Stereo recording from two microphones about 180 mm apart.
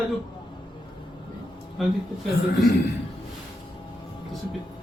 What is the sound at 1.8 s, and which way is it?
Speech, centre (ahead or behind).